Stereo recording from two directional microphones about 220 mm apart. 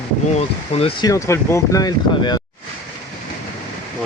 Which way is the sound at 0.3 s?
25° left (ahead or behind).